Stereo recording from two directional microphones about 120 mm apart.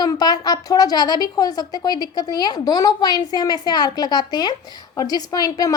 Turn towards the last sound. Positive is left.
turn(degrees=30)  # may be behind; listen again after turning